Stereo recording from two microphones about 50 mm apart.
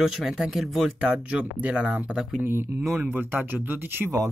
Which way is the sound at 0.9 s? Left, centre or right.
Right.